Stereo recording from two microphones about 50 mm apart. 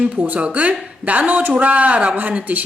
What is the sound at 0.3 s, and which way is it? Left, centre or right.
A woman's voice, right.